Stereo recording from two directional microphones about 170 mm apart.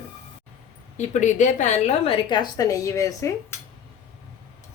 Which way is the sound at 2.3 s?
20° left (ahead or behind).